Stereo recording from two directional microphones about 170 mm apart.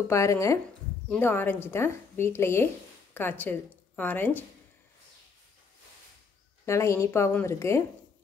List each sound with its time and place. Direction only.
0.1 s a woman's voice: 15° left (ahead or behind)
6.6 s a woman's voice: 15° left (ahead or behind)